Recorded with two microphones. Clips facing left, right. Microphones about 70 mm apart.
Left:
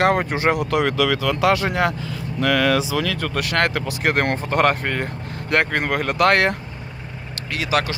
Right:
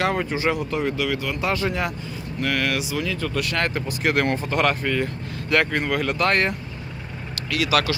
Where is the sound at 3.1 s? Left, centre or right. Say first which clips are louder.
Left 2 dB; left.